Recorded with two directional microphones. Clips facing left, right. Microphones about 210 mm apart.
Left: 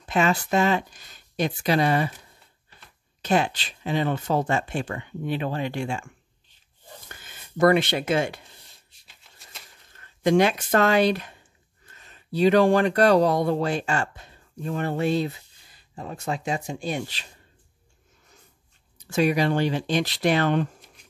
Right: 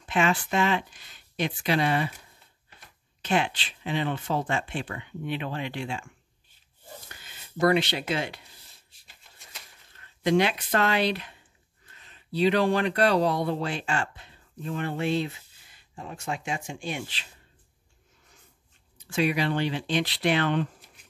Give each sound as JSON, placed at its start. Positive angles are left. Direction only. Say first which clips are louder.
{"t": 0.1, "sound": "speech", "louder": "left 3 dB", "side_deg": 40}
{"t": 3.2, "sound": "speech", "louder": "left 3 dB", "side_deg": 40}
{"t": 7.2, "sound": "speech", "louder": "left 5 dB", "side_deg": 50}
{"t": 9.9, "sound": "speech", "louder": "left 3 dB", "side_deg": 45}
{"t": 18.9, "sound": "speech", "louder": "left 4 dB", "side_deg": 40}